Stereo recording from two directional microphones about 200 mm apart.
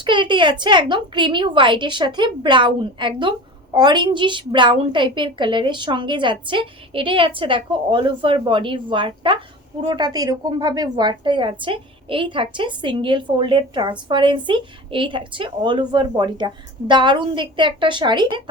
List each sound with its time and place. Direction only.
0.0 s a woman's voice: 25° right (ahead or behind)